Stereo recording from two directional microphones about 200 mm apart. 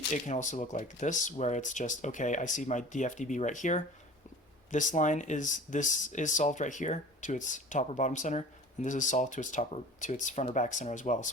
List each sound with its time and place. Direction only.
0.1 s speech: 40° left (ahead or behind)